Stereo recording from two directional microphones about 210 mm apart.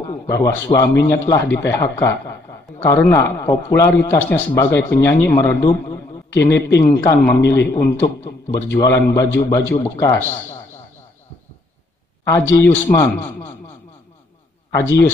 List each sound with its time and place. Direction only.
0.3 s a man's voice: 15° left (ahead or behind)
12.3 s a man's voice: 10° left (ahead or behind)